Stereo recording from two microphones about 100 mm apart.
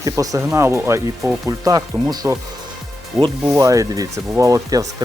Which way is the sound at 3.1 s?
Centre (ahead or behind).